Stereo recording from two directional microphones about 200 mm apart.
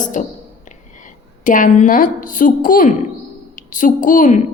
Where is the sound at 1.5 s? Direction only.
40° left (ahead or behind).